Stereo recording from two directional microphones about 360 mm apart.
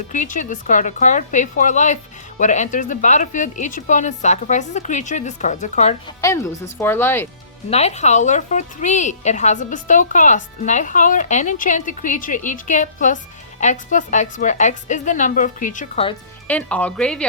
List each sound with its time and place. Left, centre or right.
0.1 s a woman's voice: left
7.7 s a woman's voice: centre
16.5 s speech: centre